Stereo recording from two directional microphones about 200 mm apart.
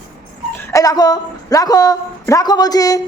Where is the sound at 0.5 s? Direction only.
15° left (ahead or behind).